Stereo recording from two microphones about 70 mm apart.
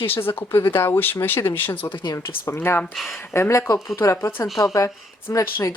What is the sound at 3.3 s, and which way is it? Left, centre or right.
Speech, left.